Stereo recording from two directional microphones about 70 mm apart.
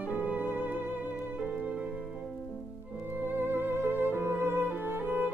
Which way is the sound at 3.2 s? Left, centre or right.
Right.